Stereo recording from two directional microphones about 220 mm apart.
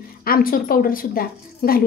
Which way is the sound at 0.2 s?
40° left (ahead or behind).